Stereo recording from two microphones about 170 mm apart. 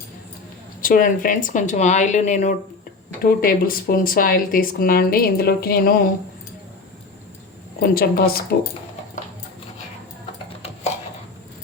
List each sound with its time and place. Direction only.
0.8 s speech: 55° left (ahead or behind)
3.2 s speech: 60° left (ahead or behind)
7.8 s speech: 60° left (ahead or behind)